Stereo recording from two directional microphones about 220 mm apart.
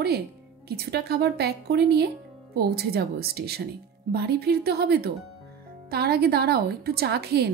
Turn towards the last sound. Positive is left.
turn(degrees=-45)  # may be behind; listen again after turning